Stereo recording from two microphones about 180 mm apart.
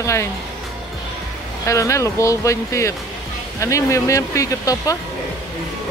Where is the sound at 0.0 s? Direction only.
15° left (ahead or behind).